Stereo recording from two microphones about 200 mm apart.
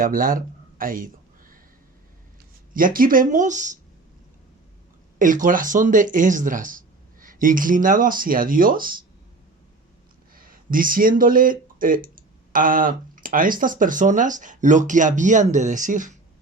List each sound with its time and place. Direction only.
0.0 s a sound: 45° right (ahead or behind)
2.7 s speech: 45° right (ahead or behind)
5.2 s speech: 40° right (ahead or behind)
10.3 s speech: 45° right (ahead or behind)